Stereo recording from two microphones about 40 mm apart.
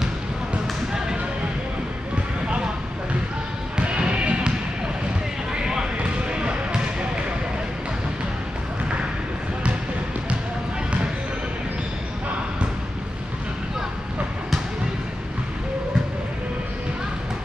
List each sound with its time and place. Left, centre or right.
2.4 s a sound: right
3.7 s basketball bounce: right
6.3 s basketball bounce: right